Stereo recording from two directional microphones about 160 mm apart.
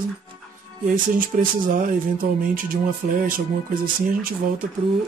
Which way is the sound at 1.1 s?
60° right (ahead or behind).